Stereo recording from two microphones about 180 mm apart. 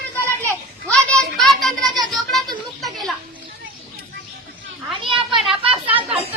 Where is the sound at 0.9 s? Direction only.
5° left (ahead or behind).